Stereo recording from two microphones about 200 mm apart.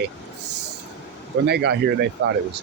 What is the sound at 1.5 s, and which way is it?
Speech, 55° right (ahead or behind).